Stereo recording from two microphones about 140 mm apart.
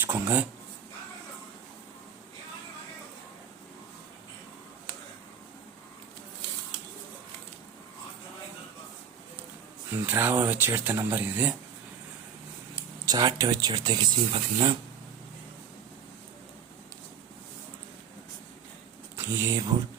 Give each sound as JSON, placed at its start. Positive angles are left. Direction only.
{"t": 0.0, "sound": "speech", "side_deg": -15}
{"t": 9.9, "sound": "speech", "side_deg": -15}
{"t": 13.1, "sound": "speech", "side_deg": -30}
{"t": 19.1, "sound": "speech", "side_deg": -20}